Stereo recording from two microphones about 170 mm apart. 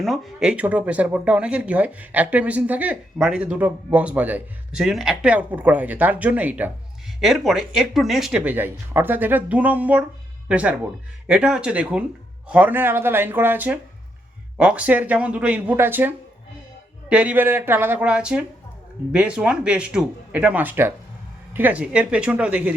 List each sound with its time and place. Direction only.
0.0 s speech: centre (ahead or behind)